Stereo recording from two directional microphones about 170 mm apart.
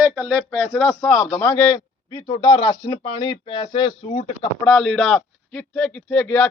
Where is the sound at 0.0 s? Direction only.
10° right (ahead or behind).